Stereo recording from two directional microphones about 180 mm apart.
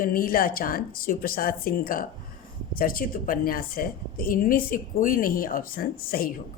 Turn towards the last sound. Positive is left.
turn(degrees=55)  # may be behind; listen again after turning